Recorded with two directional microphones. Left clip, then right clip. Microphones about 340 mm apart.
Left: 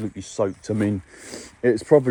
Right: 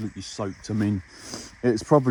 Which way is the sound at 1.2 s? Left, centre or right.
Centre.